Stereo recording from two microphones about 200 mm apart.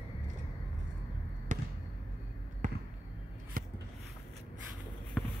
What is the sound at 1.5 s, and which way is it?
Basketball bounce, 40° right (ahead or behind).